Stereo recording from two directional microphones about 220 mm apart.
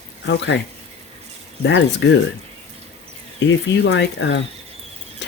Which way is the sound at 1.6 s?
55° left (ahead or behind).